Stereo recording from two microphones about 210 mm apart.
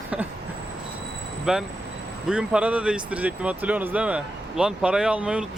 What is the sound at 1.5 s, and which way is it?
Speech, 5° right (ahead or behind).